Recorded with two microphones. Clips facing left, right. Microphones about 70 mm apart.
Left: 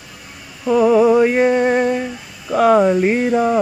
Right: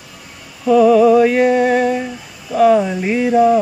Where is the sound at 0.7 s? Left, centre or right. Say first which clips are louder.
Right 3 dB; left.